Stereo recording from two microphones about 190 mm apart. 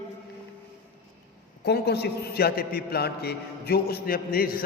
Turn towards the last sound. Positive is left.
turn(degrees=50)  # may be behind; listen again after turning